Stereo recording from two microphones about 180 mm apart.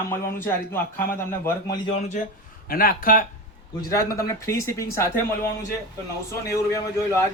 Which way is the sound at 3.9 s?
15° left (ahead or behind).